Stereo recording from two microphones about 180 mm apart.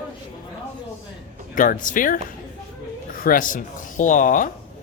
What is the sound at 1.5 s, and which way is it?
Speech, 45° left (ahead or behind).